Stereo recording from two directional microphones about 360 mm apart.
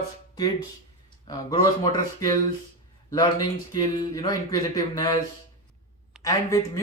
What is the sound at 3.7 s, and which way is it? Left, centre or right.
Speech, centre.